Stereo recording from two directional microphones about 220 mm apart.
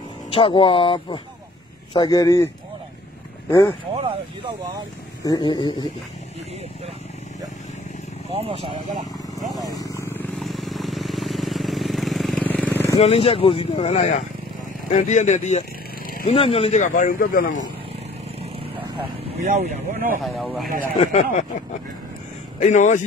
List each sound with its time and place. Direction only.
0.3 s speech: 25° left (ahead or behind)
5.2 s speech: 20° left (ahead or behind)
8.3 s speech: 25° right (ahead or behind)
9.9 s vehicle: 10° left (ahead or behind)
13.0 s speech: 25° left (ahead or behind)
19.4 s speech: 35° right (ahead or behind)
20.2 s speech: centre (ahead or behind)
21.0 s speech: 30° left (ahead or behind)
22.6 s speech: 35° left (ahead or behind)